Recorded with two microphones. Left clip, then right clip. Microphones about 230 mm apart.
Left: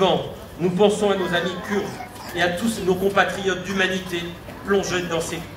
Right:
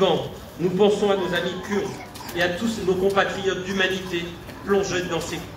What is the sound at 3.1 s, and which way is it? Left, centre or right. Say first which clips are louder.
A man's voice: left 2 dB; left.